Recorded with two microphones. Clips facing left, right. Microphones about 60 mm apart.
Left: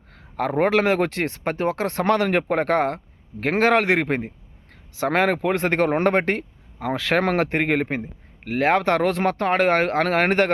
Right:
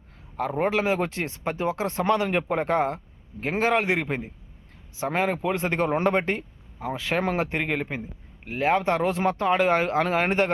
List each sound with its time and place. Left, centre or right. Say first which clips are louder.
0.1 s speech: left 4 dB; left
3.4 s speech: left 5 dB; left
4.9 s speech: left 5 dB; left
8.4 s speech: left 4 dB; left